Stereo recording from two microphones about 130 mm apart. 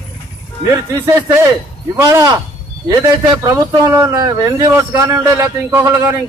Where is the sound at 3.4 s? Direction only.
25° right (ahead or behind).